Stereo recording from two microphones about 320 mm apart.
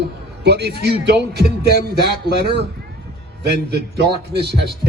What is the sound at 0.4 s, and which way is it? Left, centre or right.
A man's voice, right.